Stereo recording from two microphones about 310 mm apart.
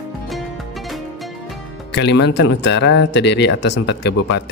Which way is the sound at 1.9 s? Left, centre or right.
Left.